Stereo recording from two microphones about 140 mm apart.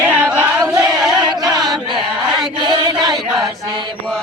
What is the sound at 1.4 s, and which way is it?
Chant, 30° right (ahead or behind).